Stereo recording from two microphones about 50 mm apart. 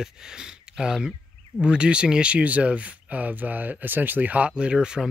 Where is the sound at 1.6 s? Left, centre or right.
Centre.